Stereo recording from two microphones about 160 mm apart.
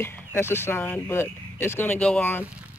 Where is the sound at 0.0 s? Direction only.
15° left (ahead or behind).